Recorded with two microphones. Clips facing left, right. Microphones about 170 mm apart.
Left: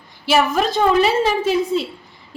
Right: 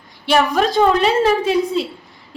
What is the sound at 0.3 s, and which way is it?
A woman's voice, centre (ahead or behind).